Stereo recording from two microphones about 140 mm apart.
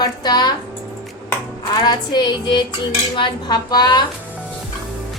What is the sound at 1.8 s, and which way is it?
A woman's voice, 30° left (ahead or behind).